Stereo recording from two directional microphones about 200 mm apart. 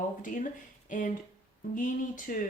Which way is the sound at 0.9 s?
40° left (ahead or behind).